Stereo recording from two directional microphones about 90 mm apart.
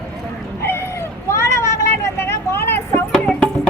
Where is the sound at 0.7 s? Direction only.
30° left (ahead or behind).